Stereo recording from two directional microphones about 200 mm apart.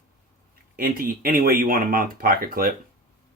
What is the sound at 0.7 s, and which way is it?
Speech, 45° right (ahead or behind).